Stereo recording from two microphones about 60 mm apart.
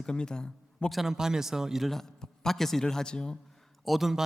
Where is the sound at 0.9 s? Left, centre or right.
Centre.